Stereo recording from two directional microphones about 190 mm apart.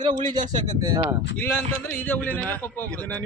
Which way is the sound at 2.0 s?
10° left (ahead or behind).